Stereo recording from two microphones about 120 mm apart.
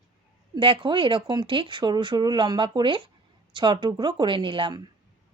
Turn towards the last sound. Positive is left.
turn(degrees=-45)  # may be behind; listen again after turning